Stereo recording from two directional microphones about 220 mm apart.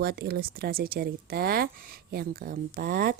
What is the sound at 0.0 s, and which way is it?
Speech, 45° right (ahead or behind).